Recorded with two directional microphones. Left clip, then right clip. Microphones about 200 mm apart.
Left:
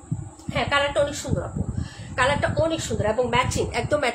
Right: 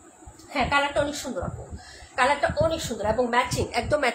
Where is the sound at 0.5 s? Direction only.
25° left (ahead or behind).